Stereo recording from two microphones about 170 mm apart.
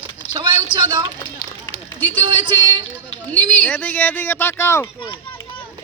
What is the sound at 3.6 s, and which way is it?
Speech, 10° left (ahead or behind).